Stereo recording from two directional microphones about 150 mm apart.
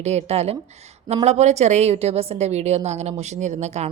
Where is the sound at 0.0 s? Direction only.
45° right (ahead or behind).